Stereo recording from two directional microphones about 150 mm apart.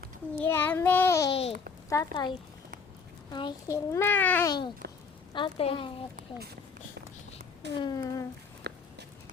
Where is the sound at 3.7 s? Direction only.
15° left (ahead or behind).